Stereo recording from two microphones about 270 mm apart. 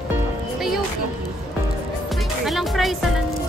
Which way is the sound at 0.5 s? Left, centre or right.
Centre.